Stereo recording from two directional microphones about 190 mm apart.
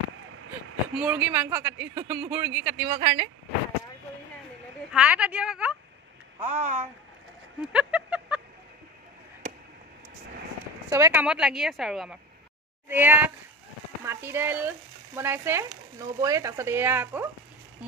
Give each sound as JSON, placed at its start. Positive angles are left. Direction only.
{"t": 0.9, "sound": "speech", "side_deg": -10}
{"t": 4.9, "sound": "speech", "side_deg": -5}
{"t": 6.4, "sound": "speech", "side_deg": -35}
{"t": 7.6, "sound": "speech", "side_deg": -5}
{"t": 10.9, "sound": "speech", "side_deg": -15}